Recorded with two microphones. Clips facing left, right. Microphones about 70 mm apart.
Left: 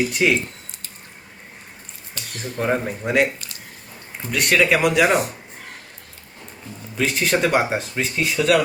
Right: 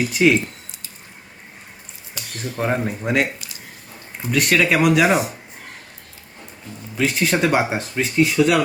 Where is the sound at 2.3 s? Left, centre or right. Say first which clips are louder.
Even; centre.